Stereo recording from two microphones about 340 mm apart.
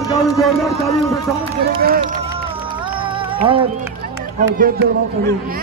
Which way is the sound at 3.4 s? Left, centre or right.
Centre.